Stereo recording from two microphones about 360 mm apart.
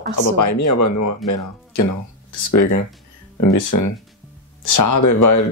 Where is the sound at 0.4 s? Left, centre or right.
Left.